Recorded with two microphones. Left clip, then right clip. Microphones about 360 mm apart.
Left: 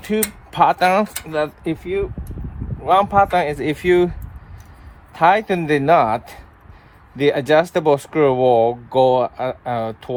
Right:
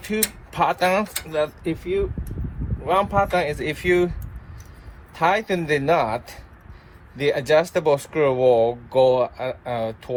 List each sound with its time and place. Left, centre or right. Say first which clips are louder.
0.1 s speech: left 4 dB; left
5.1 s speech: left 5 dB; left